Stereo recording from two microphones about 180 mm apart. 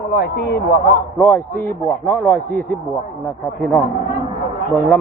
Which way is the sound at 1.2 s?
10° left (ahead or behind).